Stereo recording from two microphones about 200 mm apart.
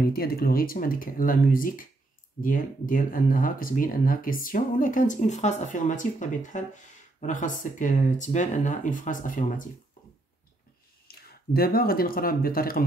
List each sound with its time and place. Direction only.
0.0 s speech: 50° left (ahead or behind)
11.1 s speech: 50° left (ahead or behind)